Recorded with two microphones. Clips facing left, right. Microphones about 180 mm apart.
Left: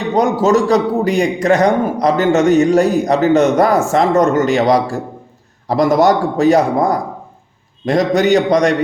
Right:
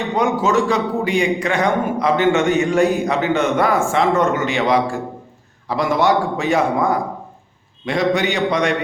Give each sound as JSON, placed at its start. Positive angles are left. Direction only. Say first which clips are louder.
{"t": 0.2, "sound": "a man's voice", "louder": "left 5 dB", "side_deg": 40}